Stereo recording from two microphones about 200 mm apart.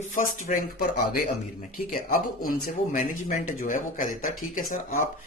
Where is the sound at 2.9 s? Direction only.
40° left (ahead or behind).